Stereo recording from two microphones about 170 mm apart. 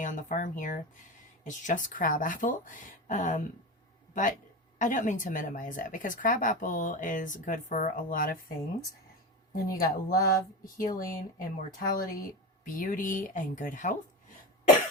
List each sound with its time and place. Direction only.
0.0 s speech: 50° left (ahead or behind)
9.6 s speech: 55° left (ahead or behind)